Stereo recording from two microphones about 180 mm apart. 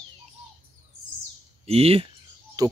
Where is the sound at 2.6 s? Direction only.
20° right (ahead or behind).